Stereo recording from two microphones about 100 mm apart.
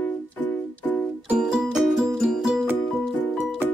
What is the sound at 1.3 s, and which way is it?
Music, 5° right (ahead or behind).